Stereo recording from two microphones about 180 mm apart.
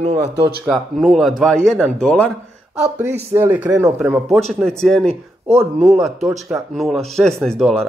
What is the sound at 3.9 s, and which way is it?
Speech, 5° right (ahead or behind).